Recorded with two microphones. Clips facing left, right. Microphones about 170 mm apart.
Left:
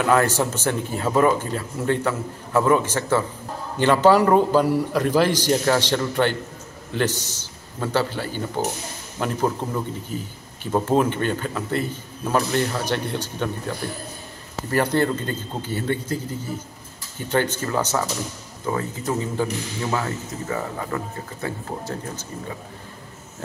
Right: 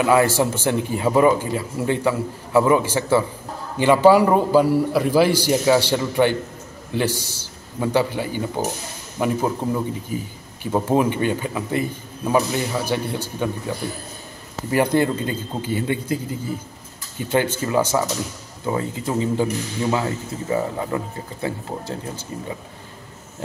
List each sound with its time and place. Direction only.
0.0 s a man's voice: 10° right (ahead or behind)
10.6 s speech: 10° right (ahead or behind)